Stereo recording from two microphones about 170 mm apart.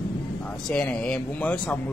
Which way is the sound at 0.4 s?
5° left (ahead or behind).